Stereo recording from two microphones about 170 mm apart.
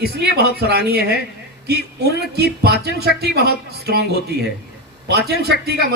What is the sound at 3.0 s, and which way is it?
Speech, 70° right (ahead or behind).